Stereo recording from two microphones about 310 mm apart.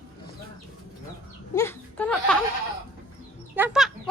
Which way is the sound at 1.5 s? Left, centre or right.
Centre.